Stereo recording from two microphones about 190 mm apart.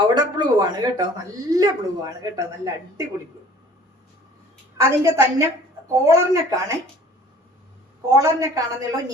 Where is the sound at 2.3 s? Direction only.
20° right (ahead or behind).